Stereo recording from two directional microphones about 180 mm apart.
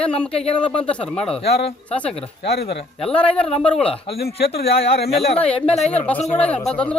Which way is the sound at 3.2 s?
5° left (ahead or behind).